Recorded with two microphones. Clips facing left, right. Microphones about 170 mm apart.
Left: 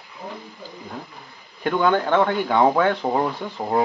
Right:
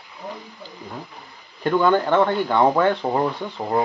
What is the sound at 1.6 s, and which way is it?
Speech, centre (ahead or behind).